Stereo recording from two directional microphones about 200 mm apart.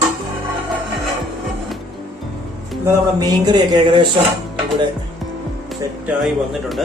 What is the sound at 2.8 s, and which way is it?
Speech, 15° right (ahead or behind).